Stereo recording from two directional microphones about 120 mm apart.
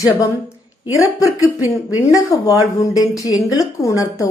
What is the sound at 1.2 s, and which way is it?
A woman's voice, 25° left (ahead or behind).